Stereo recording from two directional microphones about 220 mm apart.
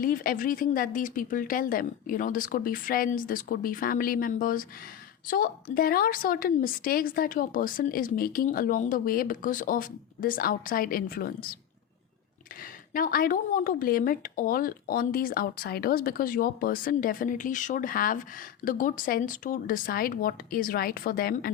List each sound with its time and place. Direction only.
0.0 s a woman's voice: 40° left (ahead or behind)
12.9 s a woman's voice: 40° left (ahead or behind)